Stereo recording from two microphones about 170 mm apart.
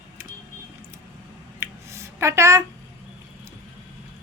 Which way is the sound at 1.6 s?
15° right (ahead or behind).